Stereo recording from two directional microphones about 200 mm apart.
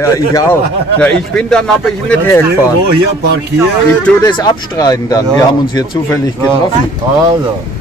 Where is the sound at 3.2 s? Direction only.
55° right (ahead or behind).